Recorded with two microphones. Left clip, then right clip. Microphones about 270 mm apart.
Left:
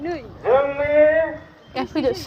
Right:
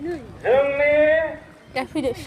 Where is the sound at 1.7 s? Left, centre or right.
Right.